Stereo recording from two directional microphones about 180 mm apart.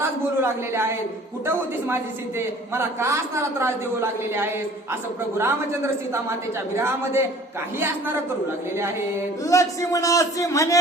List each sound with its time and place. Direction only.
0.0 s a sound: 15° right (ahead or behind)
2.7 s a woman's voice: 15° right (ahead or behind)
9.4 s a man's voice: 20° left (ahead or behind)